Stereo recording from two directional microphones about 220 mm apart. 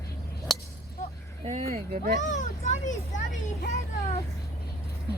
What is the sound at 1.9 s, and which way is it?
Speech, 45° right (ahead or behind).